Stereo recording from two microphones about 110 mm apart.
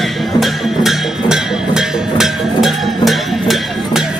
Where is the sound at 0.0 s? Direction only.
Centre (ahead or behind).